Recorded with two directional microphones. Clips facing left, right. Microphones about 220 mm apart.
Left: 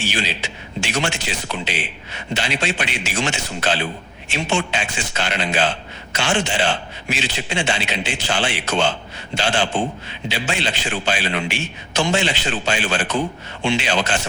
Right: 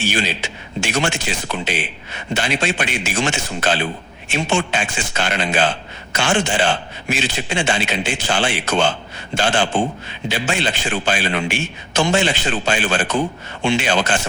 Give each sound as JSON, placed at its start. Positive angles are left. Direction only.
{"t": 0.1, "sound": "a man's voice", "side_deg": -50}